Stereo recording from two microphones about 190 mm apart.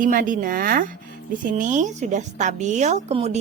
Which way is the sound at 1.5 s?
40° right (ahead or behind).